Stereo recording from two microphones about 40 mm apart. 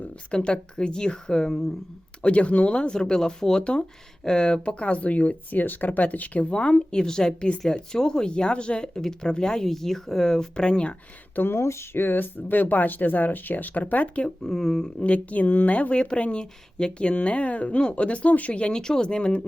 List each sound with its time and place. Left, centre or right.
0.3 s speech: left
2.2 s speech: left
2.9 s speech: centre
3.6 s speech: left
5.5 s speech: left
9.0 s speech: centre
11.4 s speech: left
14.3 s speech: centre
14.9 s speech: left
18.5 s speech: left
18.8 s speech: centre